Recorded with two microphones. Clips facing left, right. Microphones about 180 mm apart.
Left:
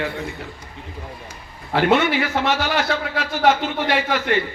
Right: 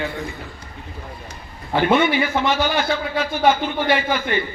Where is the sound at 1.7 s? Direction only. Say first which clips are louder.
Even; 80° left.